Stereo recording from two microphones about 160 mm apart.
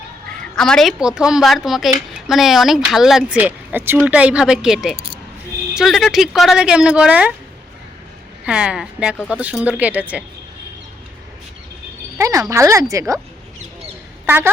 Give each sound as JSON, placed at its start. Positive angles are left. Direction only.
{"t": 0.5, "sound": "speech", "side_deg": 5}
{"t": 8.4, "sound": "speech", "side_deg": -5}
{"t": 12.1, "sound": "speech", "side_deg": -20}
{"t": 14.3, "sound": "speech", "side_deg": -10}